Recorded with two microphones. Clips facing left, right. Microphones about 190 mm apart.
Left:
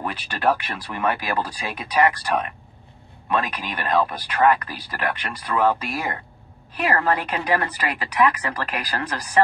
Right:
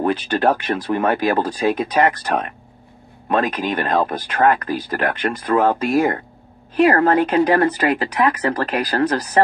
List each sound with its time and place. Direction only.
0.0 s speech: 45° right (ahead or behind)